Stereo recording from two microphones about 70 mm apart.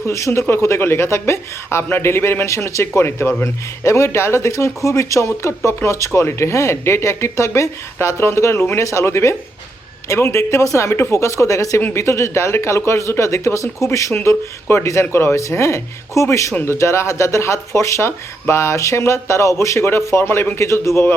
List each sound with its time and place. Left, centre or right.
0.0 s speech: left